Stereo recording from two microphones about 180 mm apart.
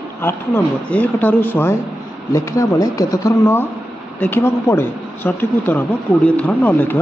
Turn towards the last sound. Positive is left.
turn(degrees=10)  # may be behind; listen again after turning